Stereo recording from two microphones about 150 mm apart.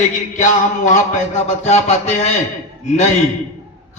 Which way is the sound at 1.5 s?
50° left (ahead or behind).